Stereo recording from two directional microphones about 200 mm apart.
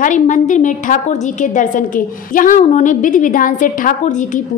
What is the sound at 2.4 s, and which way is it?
A woman's voice, 40° left (ahead or behind).